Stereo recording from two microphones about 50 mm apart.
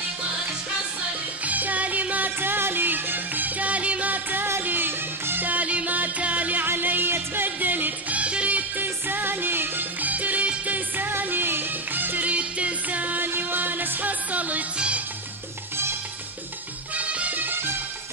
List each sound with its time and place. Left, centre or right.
1.4 s music: right
6.6 s music: right
8.8 s music: right
10.7 s music: right
12.3 s music: right
16.9 s music: right